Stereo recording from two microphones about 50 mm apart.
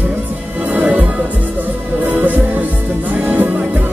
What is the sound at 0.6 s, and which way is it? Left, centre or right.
Music, right.